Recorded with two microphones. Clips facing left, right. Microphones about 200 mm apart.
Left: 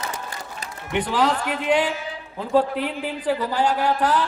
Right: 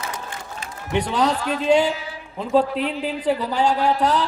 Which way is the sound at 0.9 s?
20° right (ahead or behind).